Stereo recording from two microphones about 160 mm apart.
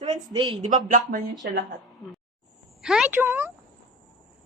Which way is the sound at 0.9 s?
55° right (ahead or behind).